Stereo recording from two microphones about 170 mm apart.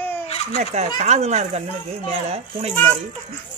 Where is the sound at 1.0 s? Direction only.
40° right (ahead or behind).